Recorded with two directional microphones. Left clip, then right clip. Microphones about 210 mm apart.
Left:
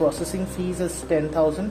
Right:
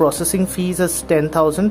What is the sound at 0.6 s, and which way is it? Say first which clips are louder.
Speech: right 6 dB; 40° right (ahead or behind).